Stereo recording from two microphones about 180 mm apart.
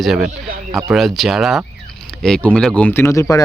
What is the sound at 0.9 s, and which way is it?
Speech, centre (ahead or behind).